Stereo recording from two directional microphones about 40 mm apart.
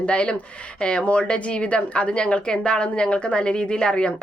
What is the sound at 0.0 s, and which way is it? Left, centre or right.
A woman's voice, left.